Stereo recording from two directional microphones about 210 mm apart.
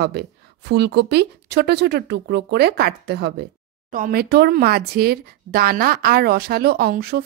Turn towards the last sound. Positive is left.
turn(degrees=-50)  # may be behind; listen again after turning